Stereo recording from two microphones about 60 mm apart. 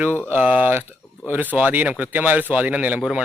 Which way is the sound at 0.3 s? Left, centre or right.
Right.